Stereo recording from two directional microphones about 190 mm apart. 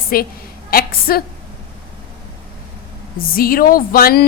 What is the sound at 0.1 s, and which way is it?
A woman's voice, 50° left (ahead or behind).